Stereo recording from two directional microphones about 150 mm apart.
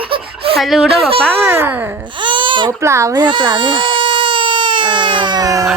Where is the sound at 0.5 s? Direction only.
Centre (ahead or behind).